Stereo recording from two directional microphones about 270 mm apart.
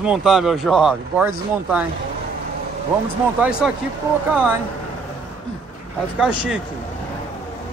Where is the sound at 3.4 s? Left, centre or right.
Centre.